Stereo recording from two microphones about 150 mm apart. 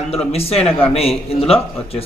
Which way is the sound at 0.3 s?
40° left (ahead or behind).